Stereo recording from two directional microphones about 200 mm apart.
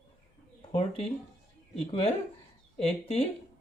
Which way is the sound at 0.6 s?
30° left (ahead or behind).